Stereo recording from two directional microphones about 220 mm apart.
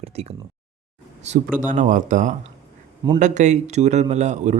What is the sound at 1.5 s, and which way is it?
Speech, 35° right (ahead or behind).